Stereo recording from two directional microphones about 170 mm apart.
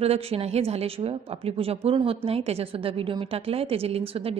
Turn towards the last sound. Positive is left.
turn(degrees=-35)  # may be behind; listen again after turning